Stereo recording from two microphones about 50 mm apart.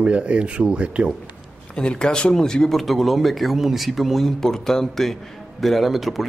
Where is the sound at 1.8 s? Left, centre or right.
Centre.